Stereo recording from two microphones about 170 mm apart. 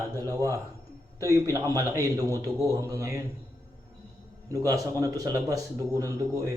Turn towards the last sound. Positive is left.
turn(degrees=-20)  # may be behind; listen again after turning